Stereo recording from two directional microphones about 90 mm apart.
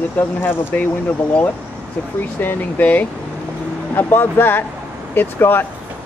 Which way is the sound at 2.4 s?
20° left (ahead or behind).